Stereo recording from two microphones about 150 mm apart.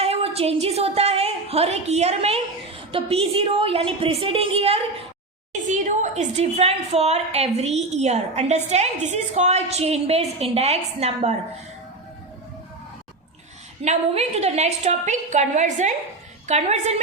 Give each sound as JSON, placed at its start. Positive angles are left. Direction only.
{"t": 0.0, "sound": "a woman's voice", "side_deg": -40}
{"t": 5.6, "sound": "a woman's voice", "side_deg": -55}
{"t": 13.8, "sound": "a woman's voice", "side_deg": -45}